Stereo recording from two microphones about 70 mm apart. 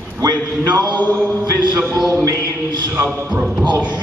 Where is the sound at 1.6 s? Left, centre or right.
Right.